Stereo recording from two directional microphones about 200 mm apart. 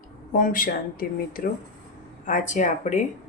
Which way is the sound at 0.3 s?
45° left (ahead or behind).